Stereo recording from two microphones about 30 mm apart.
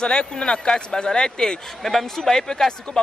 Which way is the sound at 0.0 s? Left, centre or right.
Left.